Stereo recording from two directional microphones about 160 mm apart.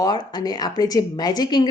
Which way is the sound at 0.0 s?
25° left (ahead or behind).